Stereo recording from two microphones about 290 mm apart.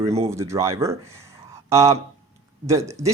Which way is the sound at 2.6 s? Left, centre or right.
Centre.